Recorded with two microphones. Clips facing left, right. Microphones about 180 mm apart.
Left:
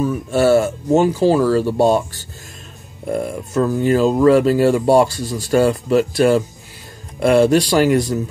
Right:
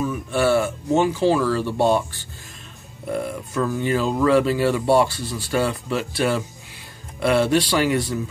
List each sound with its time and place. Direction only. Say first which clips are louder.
0.0 s speech: left 5 dB; 40° left (ahead or behind)